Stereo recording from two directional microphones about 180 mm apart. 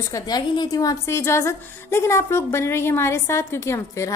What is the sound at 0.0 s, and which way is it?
A woman's voice, 20° left (ahead or behind).